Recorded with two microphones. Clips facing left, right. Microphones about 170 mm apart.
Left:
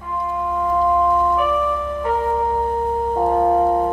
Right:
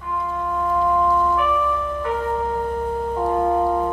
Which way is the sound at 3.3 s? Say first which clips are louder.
Left 3 dB; 35° left (ahead or behind).